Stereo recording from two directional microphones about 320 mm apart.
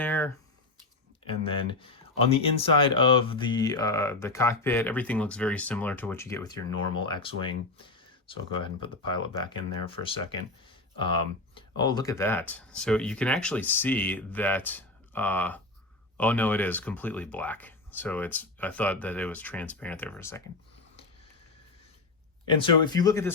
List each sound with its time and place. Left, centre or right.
0.0 s a sound: centre
1.3 s speech: centre
22.4 s speech: centre